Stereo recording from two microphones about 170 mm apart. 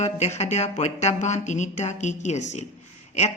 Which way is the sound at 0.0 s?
40° left (ahead or behind).